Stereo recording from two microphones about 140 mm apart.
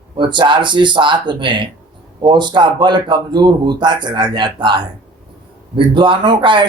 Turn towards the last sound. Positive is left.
turn(degrees=-35)  # may be behind; listen again after turning